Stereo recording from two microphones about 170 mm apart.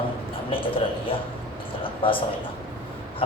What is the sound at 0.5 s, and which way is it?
A man's voice, 30° left (ahead or behind).